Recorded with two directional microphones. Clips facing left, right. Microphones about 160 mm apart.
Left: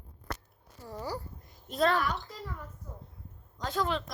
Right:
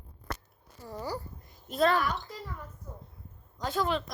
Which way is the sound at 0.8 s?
Centre (ahead or behind).